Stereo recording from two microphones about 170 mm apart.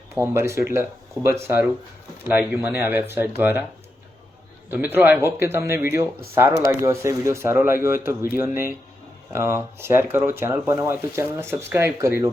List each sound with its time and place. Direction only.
0.2 s speech: 15° right (ahead or behind)
4.7 s speech: 10° right (ahead or behind)